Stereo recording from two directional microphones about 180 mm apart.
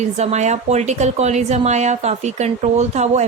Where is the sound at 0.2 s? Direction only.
40° right (ahead or behind).